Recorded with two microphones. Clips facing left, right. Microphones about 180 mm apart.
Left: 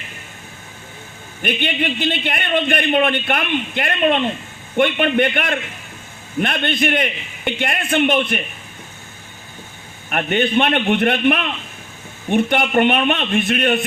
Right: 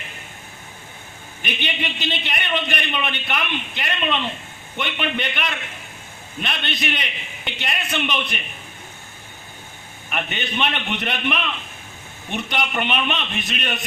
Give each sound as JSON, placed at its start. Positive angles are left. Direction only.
{"t": 1.4, "sound": "a man's voice", "side_deg": 50}
{"t": 10.1, "sound": "a man's voice", "side_deg": 50}